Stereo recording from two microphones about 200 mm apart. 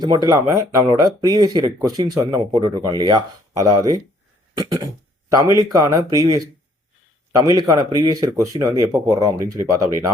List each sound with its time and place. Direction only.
0.0 s speech: 20° right (ahead or behind)
4.5 s throat clearing: 20° right (ahead or behind)
5.3 s speech: 15° right (ahead or behind)
7.3 s speech: 15° right (ahead or behind)